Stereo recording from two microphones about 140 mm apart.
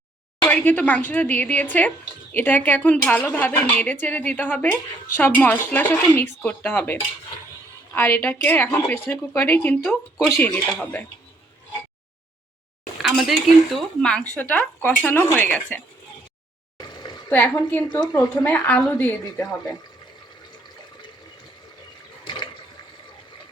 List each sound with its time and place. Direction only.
0.4 s a woman's voice: 10° left (ahead or behind)
13.0 s a woman's voice: centre (ahead or behind)
16.7 s a sound: 30° left (ahead or behind)
17.2 s a woman's voice: 15° left (ahead or behind)
22.2 s water: 35° left (ahead or behind)